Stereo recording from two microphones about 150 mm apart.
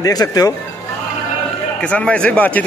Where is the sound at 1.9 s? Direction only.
5° left (ahead or behind).